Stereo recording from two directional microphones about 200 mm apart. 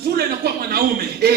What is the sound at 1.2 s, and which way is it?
Speech, 50° right (ahead or behind).